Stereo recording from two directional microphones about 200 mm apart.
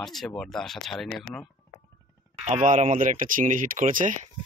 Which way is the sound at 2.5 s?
35° right (ahead or behind).